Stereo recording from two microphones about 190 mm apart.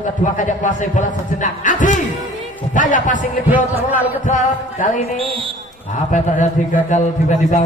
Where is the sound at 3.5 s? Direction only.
10° right (ahead or behind).